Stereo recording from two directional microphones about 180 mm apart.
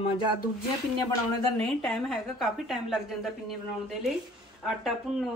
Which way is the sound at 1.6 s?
Centre (ahead or behind).